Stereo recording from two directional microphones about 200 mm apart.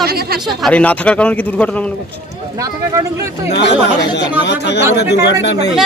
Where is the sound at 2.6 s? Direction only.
15° right (ahead or behind).